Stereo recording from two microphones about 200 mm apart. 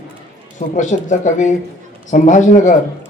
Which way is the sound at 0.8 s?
40° left (ahead or behind).